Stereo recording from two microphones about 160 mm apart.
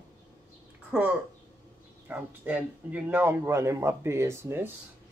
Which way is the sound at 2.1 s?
10° right (ahead or behind).